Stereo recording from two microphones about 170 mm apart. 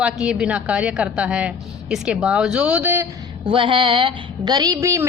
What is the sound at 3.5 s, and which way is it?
A woman's voice, 30° right (ahead or behind).